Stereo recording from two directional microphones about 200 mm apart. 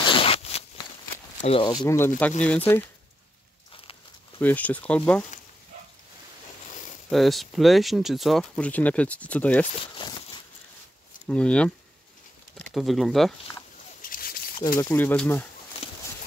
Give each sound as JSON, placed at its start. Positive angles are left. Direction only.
{"t": 0.0, "sound": "zipper", "side_deg": 25}
{"t": 1.4, "sound": "speech", "side_deg": 25}
{"t": 4.4, "sound": "speech", "side_deg": 10}
{"t": 7.1, "sound": "speech", "side_deg": 0}
{"t": 9.9, "sound": "a sound", "side_deg": 25}
{"t": 11.2, "sound": "speech", "side_deg": 5}
{"t": 14.0, "sound": "a sound", "side_deg": 45}
{"t": 14.8, "sound": "speech", "side_deg": 10}